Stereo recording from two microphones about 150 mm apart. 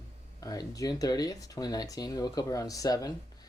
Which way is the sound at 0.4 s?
25° left (ahead or behind).